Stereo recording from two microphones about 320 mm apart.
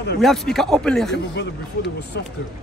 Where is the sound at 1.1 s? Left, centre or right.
Left.